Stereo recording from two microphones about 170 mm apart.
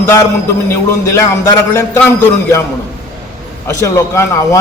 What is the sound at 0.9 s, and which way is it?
A man's voice, 20° left (ahead or behind).